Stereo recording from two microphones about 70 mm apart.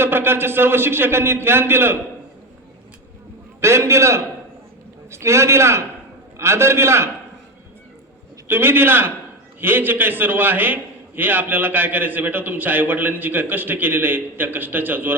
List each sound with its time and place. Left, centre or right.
0.0 s a man's voice: right
3.6 s a man's voice: right
8.4 s a man's voice: right